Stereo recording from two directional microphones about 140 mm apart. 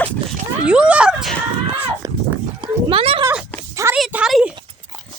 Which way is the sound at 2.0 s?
25° right (ahead or behind).